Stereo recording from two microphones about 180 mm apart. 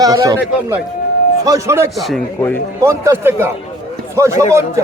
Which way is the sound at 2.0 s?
Centre (ahead or behind).